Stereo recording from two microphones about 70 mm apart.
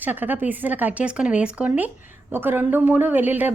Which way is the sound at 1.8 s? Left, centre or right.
Right.